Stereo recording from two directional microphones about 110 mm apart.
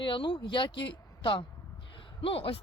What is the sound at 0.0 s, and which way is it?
Speech, 50° left (ahead or behind).